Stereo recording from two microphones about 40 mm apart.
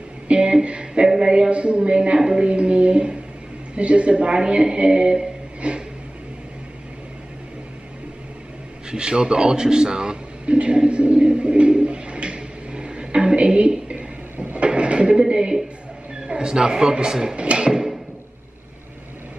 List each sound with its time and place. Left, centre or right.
0.3 s music: right
1.1 s speech: centre
1.5 s a man's voice: right
2.4 s a man's voice: right
5.6 s a sound: right
8.9 s a sound: right
14.4 s drawer open or close: right
16.3 s a man's voice: right
17.4 s music: right